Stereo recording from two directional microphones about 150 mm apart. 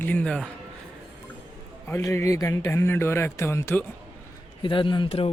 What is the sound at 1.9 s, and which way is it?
Speech, 20° left (ahead or behind).